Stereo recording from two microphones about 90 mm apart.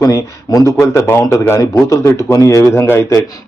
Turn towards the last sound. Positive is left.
turn(degrees=25)  # may be behind; listen again after turning